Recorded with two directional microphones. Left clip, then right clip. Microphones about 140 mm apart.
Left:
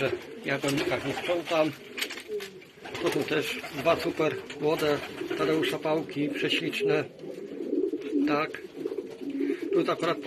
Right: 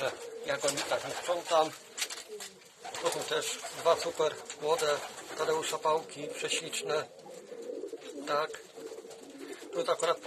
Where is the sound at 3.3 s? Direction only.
25° right (ahead or behind).